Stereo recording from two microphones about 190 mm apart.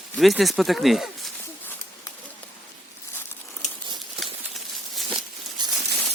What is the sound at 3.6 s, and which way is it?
Crumpling, 35° left (ahead or behind).